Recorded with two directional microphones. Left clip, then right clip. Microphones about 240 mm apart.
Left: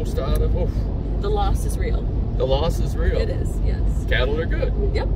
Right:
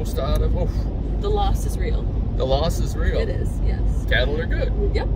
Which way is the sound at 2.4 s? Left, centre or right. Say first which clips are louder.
Even; centre.